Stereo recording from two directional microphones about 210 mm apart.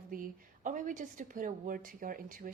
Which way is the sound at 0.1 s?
40° right (ahead or behind).